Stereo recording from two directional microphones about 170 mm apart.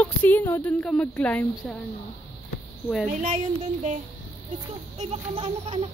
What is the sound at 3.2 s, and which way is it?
Speech, 35° right (ahead or behind).